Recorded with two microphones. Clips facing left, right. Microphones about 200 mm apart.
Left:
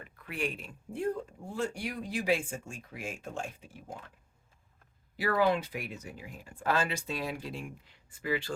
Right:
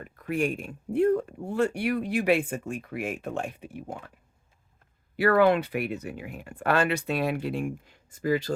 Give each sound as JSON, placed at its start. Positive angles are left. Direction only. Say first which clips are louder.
{"t": 0.0, "sound": "speech", "louder": "right 8 dB", "side_deg": -45}
{"t": 5.1, "sound": "speech", "louder": "right 7 dB", "side_deg": -65}